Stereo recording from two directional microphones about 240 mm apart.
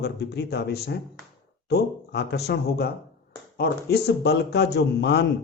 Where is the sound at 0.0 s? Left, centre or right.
Left.